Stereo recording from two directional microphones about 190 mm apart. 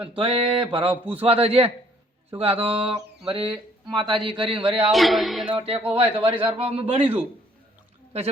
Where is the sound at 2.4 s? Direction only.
30° right (ahead or behind).